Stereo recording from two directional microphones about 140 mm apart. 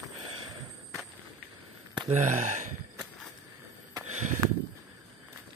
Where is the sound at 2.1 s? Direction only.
60° right (ahead or behind).